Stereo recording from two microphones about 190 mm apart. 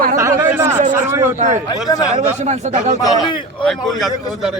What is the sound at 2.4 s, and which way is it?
Speech, 40° right (ahead or behind).